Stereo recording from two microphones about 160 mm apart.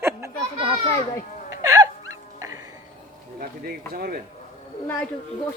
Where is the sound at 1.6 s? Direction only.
20° right (ahead or behind).